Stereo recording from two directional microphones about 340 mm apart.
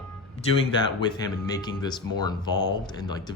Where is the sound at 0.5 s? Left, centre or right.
Centre.